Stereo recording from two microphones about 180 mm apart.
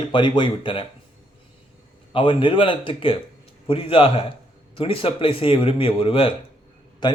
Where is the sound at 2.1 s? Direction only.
30° left (ahead or behind).